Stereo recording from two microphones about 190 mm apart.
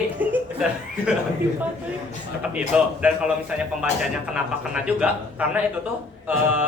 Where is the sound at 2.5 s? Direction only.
5° right (ahead or behind).